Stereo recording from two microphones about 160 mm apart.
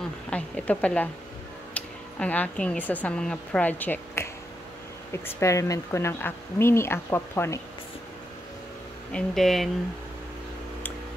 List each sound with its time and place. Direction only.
0.3 s speech: 10° left (ahead or behind)
9.1 s speech: centre (ahead or behind)